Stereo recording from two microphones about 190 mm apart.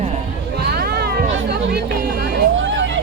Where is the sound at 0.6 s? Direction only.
55° right (ahead or behind).